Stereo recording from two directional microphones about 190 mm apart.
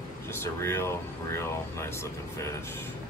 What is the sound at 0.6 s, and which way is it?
Speech, 15° left (ahead or behind).